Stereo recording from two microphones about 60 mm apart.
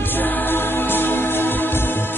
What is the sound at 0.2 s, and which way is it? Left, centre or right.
Music, left.